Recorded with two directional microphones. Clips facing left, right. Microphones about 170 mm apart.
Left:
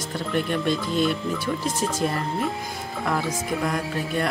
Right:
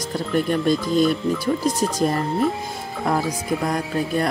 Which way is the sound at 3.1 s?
35° right (ahead or behind).